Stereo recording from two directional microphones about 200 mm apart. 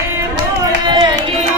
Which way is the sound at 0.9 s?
20° right (ahead or behind).